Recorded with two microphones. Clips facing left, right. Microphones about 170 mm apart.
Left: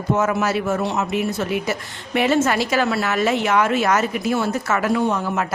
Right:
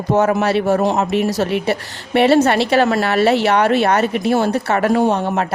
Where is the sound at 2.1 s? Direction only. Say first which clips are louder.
Right 6 dB; 35° right (ahead or behind).